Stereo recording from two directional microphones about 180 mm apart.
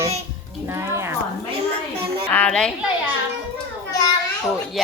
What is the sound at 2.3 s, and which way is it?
Speech, 5° left (ahead or behind).